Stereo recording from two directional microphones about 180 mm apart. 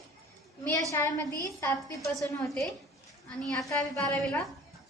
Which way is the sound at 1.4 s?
15° left (ahead or behind).